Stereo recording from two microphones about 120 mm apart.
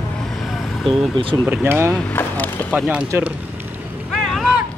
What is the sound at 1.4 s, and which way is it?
Speech, 15° right (ahead or behind).